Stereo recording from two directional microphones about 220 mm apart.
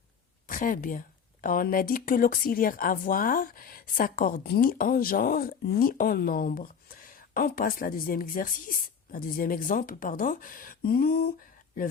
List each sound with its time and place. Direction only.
0.4 s speech: 35° left (ahead or behind)